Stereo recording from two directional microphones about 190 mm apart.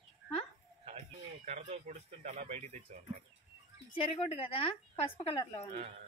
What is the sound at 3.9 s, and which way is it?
Speech, 30° left (ahead or behind).